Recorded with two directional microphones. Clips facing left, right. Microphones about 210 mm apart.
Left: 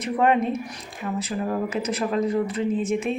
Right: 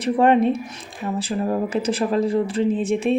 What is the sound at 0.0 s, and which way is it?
Speech, 30° right (ahead or behind).